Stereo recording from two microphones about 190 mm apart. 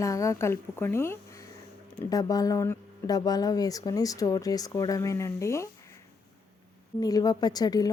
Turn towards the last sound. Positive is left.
turn(degrees=20)  # may be behind; listen again after turning